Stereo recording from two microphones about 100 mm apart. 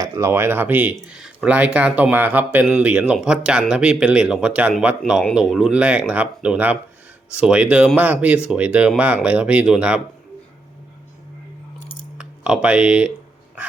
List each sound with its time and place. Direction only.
0.0 s speech: 25° right (ahead or behind); by 10.0 s 10° right (ahead or behind)
12.1 s keys jangling: 10° right (ahead or behind)
12.6 s speech: 10° right (ahead or behind)